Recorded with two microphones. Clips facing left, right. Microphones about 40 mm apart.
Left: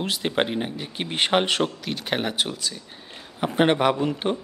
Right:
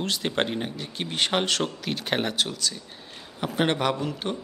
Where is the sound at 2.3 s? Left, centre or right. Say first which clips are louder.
Left 1 dB; centre.